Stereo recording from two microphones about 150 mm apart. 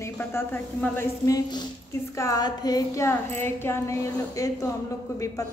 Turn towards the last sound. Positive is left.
turn(degrees=15)  # may be behind; listen again after turning